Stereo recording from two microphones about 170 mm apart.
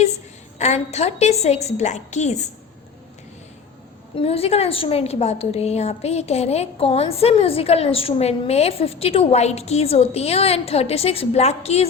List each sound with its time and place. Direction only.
0.6 s a woman's voice: 40° left (ahead or behind)
4.1 s a woman's voice: 35° left (ahead or behind)